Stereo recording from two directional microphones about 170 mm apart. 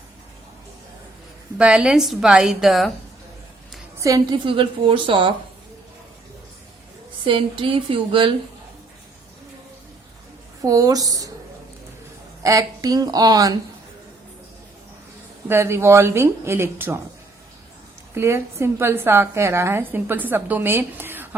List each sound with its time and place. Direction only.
1.5 s a woman's voice: 5° right (ahead or behind)
3.9 s a woman's voice: 20° right (ahead or behind)
4.4 s speech: 30° right (ahead or behind)
7.3 s speech: 30° right (ahead or behind)
10.6 s speech: 20° right (ahead or behind)
12.4 s speech: 20° right (ahead or behind)
15.4 s a woman's voice: 15° right (ahead or behind)
18.1 s a woman's voice: 15° right (ahead or behind)